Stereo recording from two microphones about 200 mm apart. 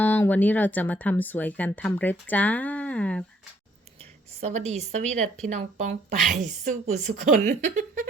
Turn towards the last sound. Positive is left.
turn(degrees=-35)  # may be behind; listen again after turning